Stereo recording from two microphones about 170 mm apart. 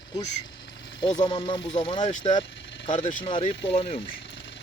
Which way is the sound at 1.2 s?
25° left (ahead or behind).